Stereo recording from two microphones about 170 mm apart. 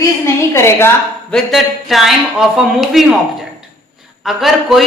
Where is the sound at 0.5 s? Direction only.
15° left (ahead or behind).